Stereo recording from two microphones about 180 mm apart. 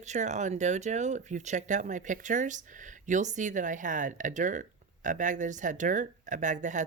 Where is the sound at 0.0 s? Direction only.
40° right (ahead or behind).